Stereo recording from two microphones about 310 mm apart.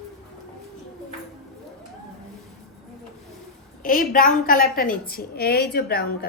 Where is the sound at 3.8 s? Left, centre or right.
Left.